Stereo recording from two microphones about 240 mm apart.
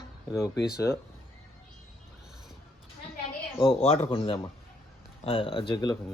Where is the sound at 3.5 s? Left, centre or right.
Left.